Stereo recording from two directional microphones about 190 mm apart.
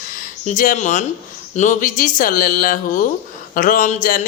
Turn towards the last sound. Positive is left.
turn(degrees=45)  # may be behind; listen again after turning